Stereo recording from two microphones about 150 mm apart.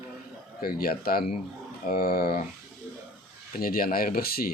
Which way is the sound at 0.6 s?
85° left.